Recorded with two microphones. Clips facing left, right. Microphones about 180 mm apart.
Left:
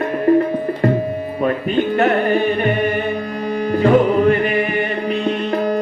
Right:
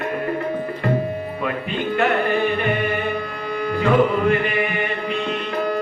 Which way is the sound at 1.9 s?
35° left (ahead or behind).